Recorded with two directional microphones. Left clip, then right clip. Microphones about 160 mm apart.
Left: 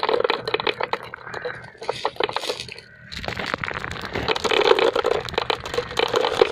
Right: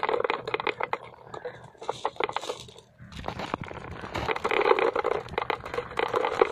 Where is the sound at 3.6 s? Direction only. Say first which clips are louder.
Left 12 dB; 50° right (ahead or behind).